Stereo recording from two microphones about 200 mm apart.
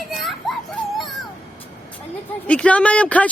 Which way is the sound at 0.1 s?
Centre (ahead or behind).